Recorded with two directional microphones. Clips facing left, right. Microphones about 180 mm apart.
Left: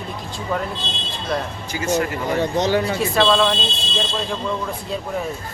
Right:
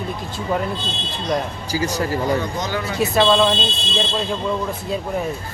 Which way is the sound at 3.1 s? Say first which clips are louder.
Right 2 dB; 15° right (ahead or behind).